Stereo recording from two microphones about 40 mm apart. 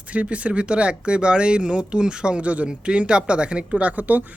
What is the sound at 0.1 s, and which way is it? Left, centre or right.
Speech, right.